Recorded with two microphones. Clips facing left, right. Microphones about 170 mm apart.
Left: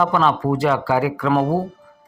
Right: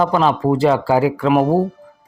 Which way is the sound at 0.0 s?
30° right (ahead or behind).